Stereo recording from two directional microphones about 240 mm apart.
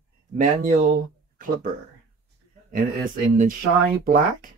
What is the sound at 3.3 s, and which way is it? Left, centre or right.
Speech, right.